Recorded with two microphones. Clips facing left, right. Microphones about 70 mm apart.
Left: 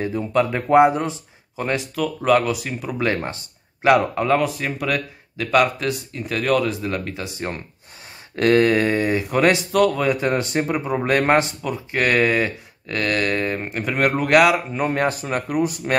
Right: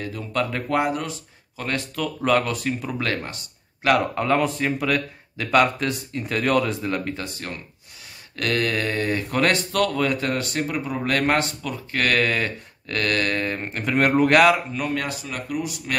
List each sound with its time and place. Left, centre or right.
0.0 s speech: left
3.2 s speech: left
4.0 s speech: centre
7.2 s speech: centre
14.7 s speech: left